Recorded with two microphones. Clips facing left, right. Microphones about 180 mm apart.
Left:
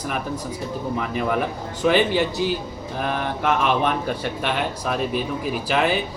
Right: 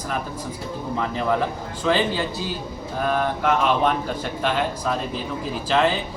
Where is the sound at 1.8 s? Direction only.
15° left (ahead or behind).